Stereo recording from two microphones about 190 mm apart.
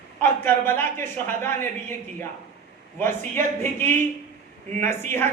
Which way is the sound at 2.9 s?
10° left (ahead or behind).